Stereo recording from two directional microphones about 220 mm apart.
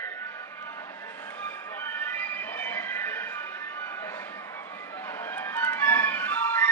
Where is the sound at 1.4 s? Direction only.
10° left (ahead or behind).